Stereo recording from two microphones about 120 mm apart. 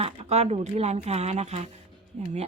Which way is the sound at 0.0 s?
60° right (ahead or behind).